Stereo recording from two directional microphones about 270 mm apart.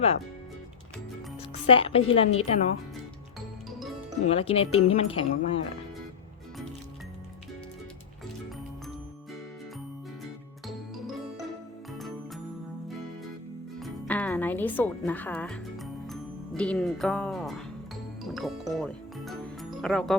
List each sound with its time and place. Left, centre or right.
1.6 s speech: left
4.3 s speech: left
10.7 s music: centre
13.7 s music: centre
16.6 s speech: centre